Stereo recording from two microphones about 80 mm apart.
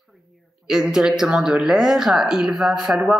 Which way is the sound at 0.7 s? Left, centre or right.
Centre.